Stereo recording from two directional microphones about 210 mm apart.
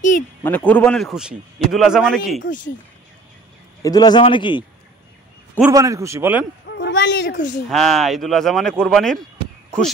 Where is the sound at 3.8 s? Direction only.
20° left (ahead or behind).